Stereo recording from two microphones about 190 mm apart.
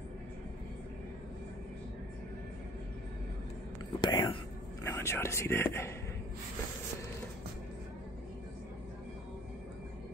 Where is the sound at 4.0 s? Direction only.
25° left (ahead or behind).